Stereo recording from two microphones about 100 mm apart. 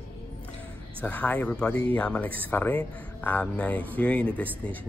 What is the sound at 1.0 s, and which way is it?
Speech, 15° left (ahead or behind).